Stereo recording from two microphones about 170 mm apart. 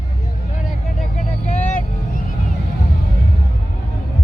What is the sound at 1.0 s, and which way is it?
Vehicle, 40° left (ahead or behind).